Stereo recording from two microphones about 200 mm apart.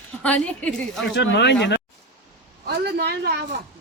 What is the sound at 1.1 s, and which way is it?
Speech, 60° left (ahead or behind).